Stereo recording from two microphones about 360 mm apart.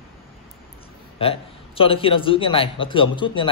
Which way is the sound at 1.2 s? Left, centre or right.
Centre.